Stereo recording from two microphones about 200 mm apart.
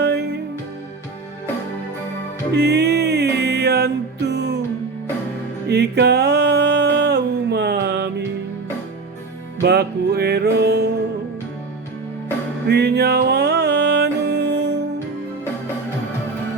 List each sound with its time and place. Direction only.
0.0 s music: 55° right (ahead or behind)
2.5 s music: 55° right (ahead or behind)
5.6 s music: 55° right (ahead or behind)
9.6 s music: 55° right (ahead or behind)
12.6 s music: 55° right (ahead or behind)